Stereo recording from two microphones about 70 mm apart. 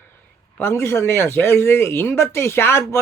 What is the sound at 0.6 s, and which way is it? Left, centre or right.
Speech, left.